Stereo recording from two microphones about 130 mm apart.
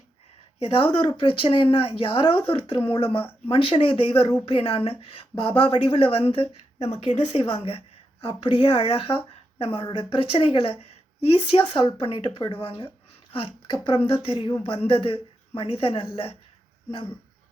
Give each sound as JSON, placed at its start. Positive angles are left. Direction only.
{"t": 0.6, "sound": "speech", "side_deg": 45}